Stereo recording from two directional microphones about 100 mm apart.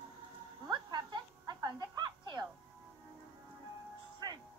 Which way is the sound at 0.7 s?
45° right (ahead or behind).